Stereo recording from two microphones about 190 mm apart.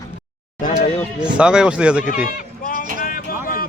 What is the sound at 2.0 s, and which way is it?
Speech, 45° left (ahead or behind).